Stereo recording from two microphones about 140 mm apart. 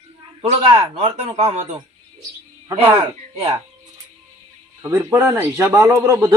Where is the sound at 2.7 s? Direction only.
20° right (ahead or behind).